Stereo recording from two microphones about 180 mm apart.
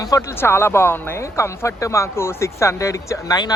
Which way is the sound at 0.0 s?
15° left (ahead or behind).